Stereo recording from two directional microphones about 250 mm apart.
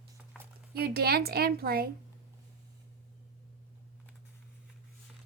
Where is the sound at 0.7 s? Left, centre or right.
Right.